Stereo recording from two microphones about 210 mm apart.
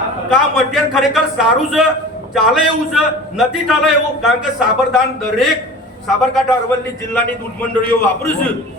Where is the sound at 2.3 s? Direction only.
Centre (ahead or behind).